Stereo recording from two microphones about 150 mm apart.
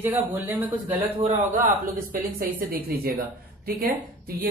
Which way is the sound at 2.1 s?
75° right (ahead or behind).